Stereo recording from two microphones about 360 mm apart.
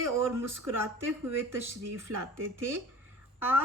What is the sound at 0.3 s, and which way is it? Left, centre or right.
Speech, centre.